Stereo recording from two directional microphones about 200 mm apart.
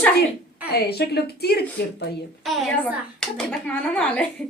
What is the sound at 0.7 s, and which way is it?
A woman's voice, 55° left (ahead or behind).